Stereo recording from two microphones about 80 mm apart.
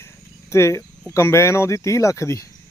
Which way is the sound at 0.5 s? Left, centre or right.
Left.